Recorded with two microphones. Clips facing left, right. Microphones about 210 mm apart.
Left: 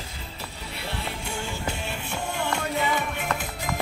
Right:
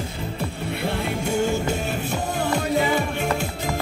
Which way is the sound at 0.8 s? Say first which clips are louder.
Right 8 dB; 50° right (ahead or behind).